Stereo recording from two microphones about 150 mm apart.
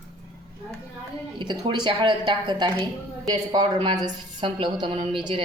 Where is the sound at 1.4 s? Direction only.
30° right (ahead or behind).